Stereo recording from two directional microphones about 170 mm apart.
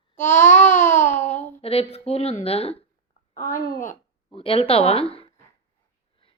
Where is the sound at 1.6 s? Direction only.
35° left (ahead or behind).